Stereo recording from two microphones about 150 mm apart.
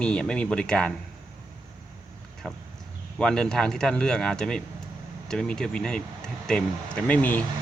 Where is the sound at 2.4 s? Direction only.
5° left (ahead or behind).